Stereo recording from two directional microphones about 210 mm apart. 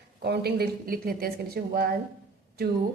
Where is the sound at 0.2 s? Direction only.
50° right (ahead or behind).